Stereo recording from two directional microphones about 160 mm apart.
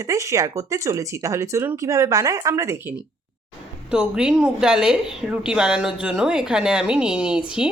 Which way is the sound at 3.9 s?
5° right (ahead or behind).